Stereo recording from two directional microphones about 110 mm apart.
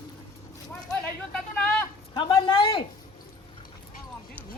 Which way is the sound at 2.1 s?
45° left (ahead or behind).